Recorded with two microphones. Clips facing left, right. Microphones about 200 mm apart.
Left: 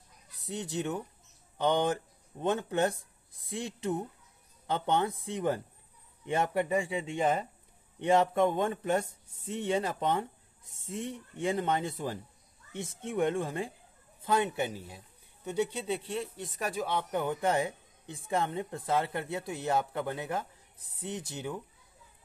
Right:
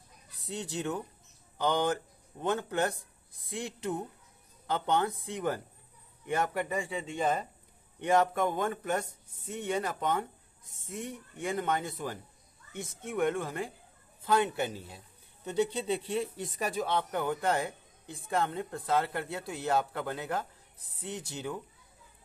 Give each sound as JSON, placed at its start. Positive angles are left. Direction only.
{"t": 0.5, "sound": "a man's voice", "side_deg": 20}
{"t": 16.8, "sound": "speech", "side_deg": 15}